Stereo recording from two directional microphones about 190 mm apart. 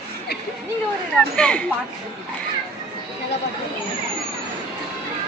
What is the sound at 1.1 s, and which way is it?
Speech, 5° left (ahead or behind).